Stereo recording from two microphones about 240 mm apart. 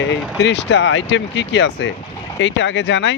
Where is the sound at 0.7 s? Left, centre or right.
Left.